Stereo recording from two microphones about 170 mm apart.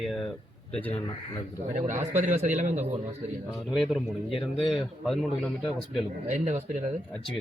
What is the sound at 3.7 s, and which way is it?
A man's voice, centre (ahead or behind).